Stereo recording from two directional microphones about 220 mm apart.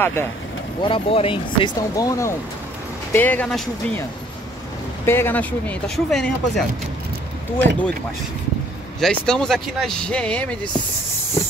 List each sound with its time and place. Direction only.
0.0 s speech: 10° left (ahead or behind)
0.7 s speech: 25° left (ahead or behind); by 4.0 s 5° left (ahead or behind)
5.0 s speech: 10° left (ahead or behind)
9.0 s speech: 5° left (ahead or behind)